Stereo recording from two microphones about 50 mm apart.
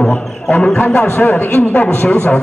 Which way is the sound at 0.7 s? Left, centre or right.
Left.